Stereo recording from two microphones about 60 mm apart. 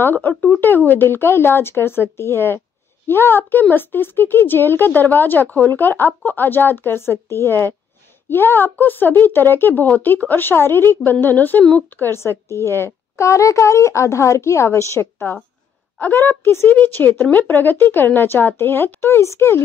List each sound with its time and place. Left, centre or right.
0.0 s speech: left
12.2 s speech: left
16.0 s speech: left